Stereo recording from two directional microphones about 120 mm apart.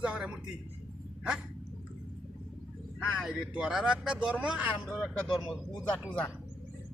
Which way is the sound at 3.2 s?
5° right (ahead or behind).